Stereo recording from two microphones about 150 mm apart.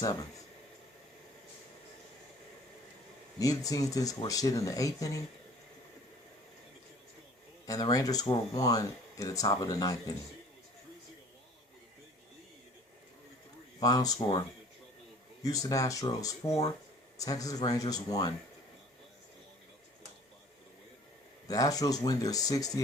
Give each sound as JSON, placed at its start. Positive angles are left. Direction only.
{"t": 0.0, "sound": "speech", "side_deg": 25}
{"t": 3.3, "sound": "speech", "side_deg": 25}
{"t": 7.7, "sound": "speech", "side_deg": 25}
{"t": 13.7, "sound": "speech", "side_deg": 25}
{"t": 15.4, "sound": "speech", "side_deg": 25}
{"t": 21.4, "sound": "speech", "side_deg": 25}